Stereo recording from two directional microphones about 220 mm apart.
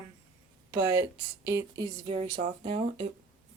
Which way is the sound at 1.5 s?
15° right (ahead or behind).